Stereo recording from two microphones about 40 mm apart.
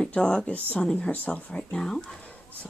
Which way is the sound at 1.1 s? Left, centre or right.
Left.